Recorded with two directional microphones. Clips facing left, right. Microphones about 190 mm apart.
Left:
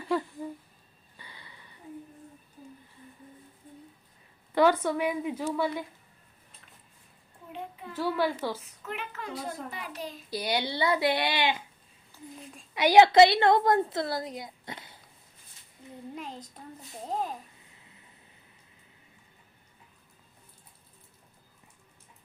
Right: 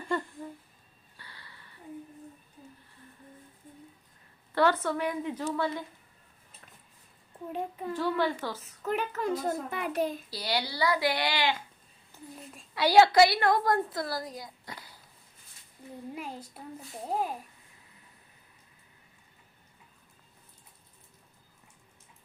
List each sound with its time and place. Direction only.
0.0 s a sound: 5° left (ahead or behind)
1.1 s a sound: 15° left (ahead or behind)
4.5 s a woman's voice: 15° left (ahead or behind)
7.5 s a child's voice: 40° right (ahead or behind)
7.9 s a woman's voice: 5° left (ahead or behind)
8.8 s a child's voice: 40° right (ahead or behind); by 10.2 s 55° right (ahead or behind)
10.2 s a woman's voice: 20° left (ahead or behind)
12.7 s a woman's voice: 20° left (ahead or behind)
16.1 s a woman's voice: 10° right (ahead or behind)